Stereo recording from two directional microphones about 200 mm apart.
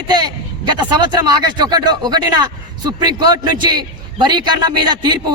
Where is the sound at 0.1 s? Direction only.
20° right (ahead or behind).